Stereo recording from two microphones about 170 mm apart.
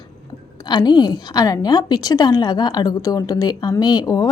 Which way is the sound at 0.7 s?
25° left (ahead or behind).